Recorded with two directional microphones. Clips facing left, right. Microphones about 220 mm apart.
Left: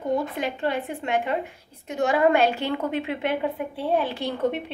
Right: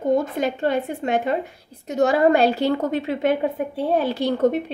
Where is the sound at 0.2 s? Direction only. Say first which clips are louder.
Right 4 dB; 40° right (ahead or behind).